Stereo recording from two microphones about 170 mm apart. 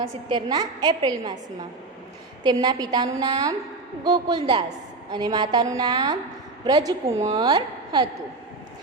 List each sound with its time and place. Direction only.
0.3 s a woman's voice: 25° right (ahead or behind)
2.4 s a woman's voice: 25° right (ahead or behind)